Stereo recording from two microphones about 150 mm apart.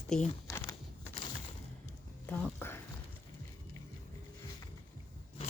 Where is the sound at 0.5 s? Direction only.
20° left (ahead or behind).